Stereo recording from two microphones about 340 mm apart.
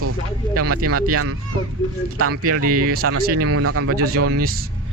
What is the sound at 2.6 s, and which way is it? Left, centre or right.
Speech, right.